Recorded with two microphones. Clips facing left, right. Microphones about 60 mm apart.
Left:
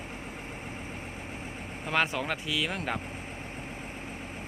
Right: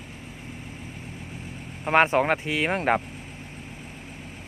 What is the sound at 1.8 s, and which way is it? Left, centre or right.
Speech, right.